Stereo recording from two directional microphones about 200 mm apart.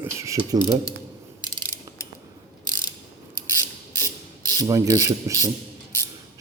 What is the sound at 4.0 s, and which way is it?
Ratchet, 15° left (ahead or behind).